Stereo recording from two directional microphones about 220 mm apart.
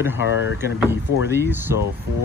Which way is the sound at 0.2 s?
60° left (ahead or behind).